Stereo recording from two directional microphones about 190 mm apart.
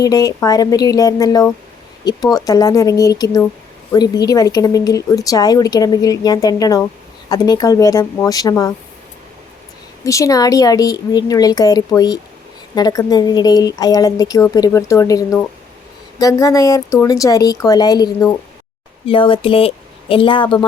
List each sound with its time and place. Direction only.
0.0 s a woman's voice: 20° left (ahead or behind)
10.0 s a woman's voice: 15° left (ahead or behind)